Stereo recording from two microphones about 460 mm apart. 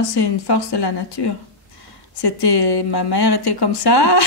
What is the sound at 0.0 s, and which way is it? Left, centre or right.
A woman's voice, left.